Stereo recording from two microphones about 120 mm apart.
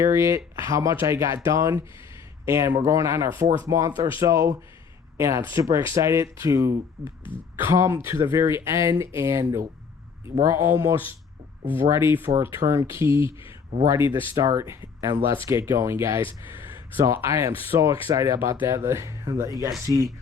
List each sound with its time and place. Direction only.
0.0 s speech: 25° right (ahead or behind)
7.0 s speech: centre (ahead or behind)
7.6 s speech: 25° right (ahead or behind)